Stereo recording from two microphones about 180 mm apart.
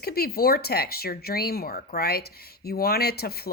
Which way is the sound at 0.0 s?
60° left (ahead or behind).